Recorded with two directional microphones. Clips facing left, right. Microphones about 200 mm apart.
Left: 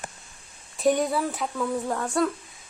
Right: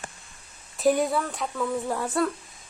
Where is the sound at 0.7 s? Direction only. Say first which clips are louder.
Even; centre (ahead or behind).